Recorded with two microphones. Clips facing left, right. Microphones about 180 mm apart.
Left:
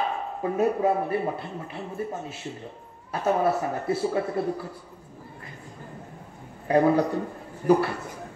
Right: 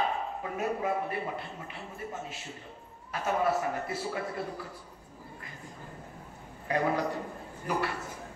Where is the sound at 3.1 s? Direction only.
30° left (ahead or behind).